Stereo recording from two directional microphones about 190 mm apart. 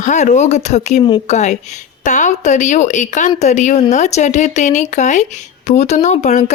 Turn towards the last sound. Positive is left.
turn(degrees=35)  # may be behind; listen again after turning